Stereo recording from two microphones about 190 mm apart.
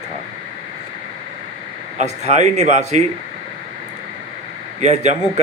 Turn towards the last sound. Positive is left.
turn(degrees=-35)  # may be behind; listen again after turning